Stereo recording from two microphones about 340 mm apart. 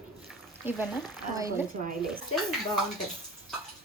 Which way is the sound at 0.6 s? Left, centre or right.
Centre.